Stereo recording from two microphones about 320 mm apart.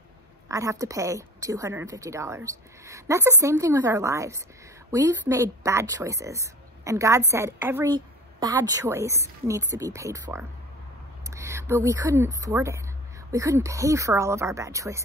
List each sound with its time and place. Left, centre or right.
0.5 s speech: centre